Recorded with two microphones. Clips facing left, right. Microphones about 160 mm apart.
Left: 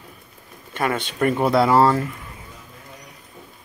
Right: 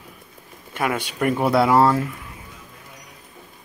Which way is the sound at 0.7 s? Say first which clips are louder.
Left 1 dB; 10° right (ahead or behind).